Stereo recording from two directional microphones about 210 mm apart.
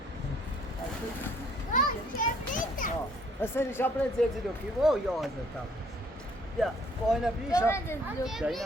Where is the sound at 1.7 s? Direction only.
40° left (ahead or behind).